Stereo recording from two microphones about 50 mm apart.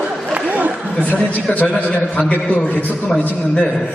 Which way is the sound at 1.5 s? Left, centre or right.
Left.